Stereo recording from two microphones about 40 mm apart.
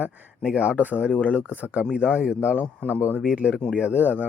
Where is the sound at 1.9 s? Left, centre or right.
Right.